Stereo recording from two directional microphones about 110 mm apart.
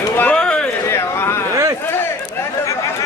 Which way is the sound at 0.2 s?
10° left (ahead or behind).